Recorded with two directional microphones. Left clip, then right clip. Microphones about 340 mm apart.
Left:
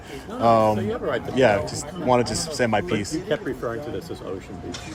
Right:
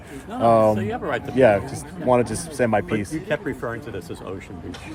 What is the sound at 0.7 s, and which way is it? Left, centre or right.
Speech, right.